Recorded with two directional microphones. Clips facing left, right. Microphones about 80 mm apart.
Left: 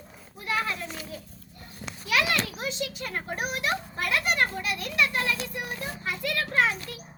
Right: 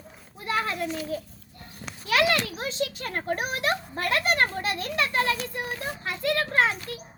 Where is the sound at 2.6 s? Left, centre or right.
Right.